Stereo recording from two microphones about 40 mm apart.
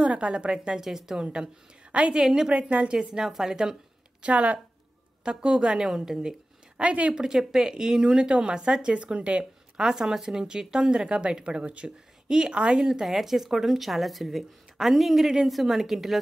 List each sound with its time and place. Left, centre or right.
0.0 s a woman's voice: right
0.7 s speech: centre
1.2 s a woman's voice: right
2.1 s speech: centre
2.5 s speech: right
2.9 s speech: centre
4.2 s speech: right
5.2 s a woman's voice: right
6.8 s speech: right
7.1 s a woman's voice: centre
8.9 s speech: right
9.4 s speech: centre
11.1 s a woman's voice: right
13.0 s a woman's voice: centre